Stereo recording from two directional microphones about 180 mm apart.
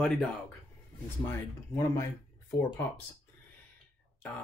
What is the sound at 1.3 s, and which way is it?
Speech, 15° left (ahead or behind).